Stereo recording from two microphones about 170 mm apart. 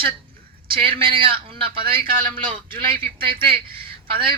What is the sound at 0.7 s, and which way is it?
A man's voice, 30° right (ahead or behind).